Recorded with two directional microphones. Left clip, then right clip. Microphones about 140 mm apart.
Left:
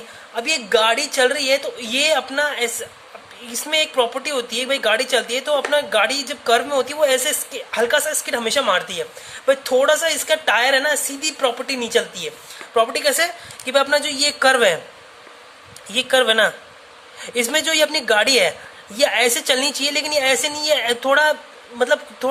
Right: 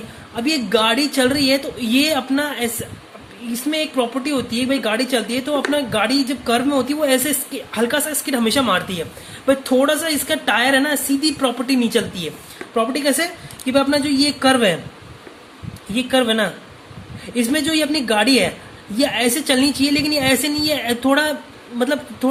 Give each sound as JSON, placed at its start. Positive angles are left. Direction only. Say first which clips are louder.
{"t": 0.3, "sound": "speech", "louder": "even", "side_deg": 30}
{"t": 3.5, "sound": "speech", "louder": "left 2 dB", "side_deg": 40}
{"t": 12.7, "sound": "speech", "louder": "left 1 dB", "side_deg": 40}
{"t": 15.9, "sound": "speech", "louder": "left 2 dB", "side_deg": 40}